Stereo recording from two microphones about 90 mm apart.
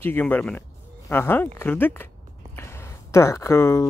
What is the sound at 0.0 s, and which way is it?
Speech, 20° left (ahead or behind).